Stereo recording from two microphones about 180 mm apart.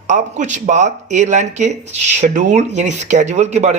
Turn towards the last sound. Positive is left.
turn(degrees=-40)  # may be behind; listen again after turning